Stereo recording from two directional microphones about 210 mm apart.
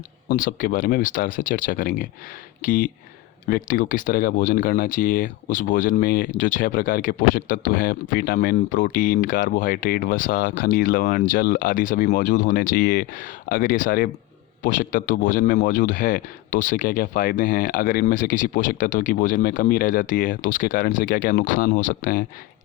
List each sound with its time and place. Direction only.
0.3 s speech: 40° left (ahead or behind)